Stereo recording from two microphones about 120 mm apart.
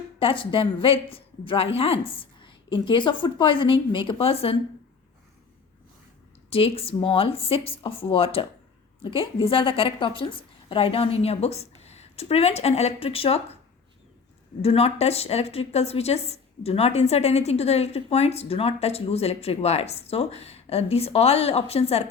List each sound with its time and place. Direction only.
0.2 s a woman's voice: 50° left (ahead or behind)
6.5 s a woman's voice: 50° left (ahead or behind)
14.6 s a woman's voice: 55° left (ahead or behind)